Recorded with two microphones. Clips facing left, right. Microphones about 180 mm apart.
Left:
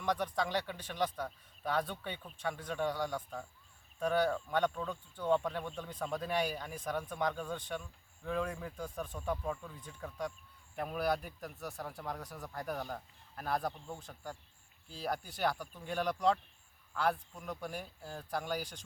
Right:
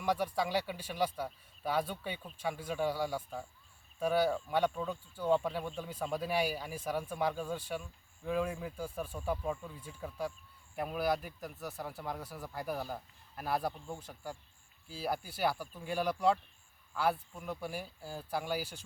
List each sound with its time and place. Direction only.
0.0 s speech: 10° right (ahead or behind)